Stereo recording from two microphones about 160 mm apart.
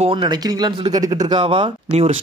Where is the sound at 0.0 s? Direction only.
30° right (ahead or behind).